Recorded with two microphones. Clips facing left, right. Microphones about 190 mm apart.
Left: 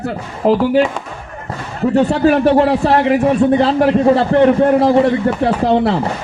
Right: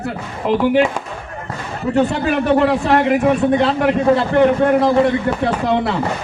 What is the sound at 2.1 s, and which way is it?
A man's voice, 35° left (ahead or behind).